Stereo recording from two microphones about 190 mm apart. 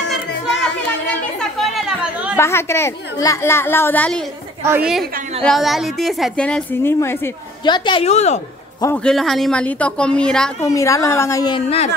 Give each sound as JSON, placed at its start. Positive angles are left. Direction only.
{"t": 1.0, "sound": "chatter", "side_deg": 0}
{"t": 2.3, "sound": "a woman's voice", "side_deg": 15}
{"t": 4.6, "sound": "a woman's voice", "side_deg": -5}
{"t": 7.6, "sound": "a woman's voice", "side_deg": 25}
{"t": 8.8, "sound": "a woman's voice", "side_deg": 5}
{"t": 10.6, "sound": "a woman's voice", "side_deg": 15}